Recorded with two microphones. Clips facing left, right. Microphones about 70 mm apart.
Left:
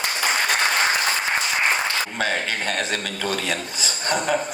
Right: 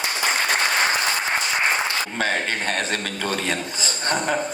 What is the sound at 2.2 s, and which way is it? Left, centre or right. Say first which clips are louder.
Speech: right 2 dB; right.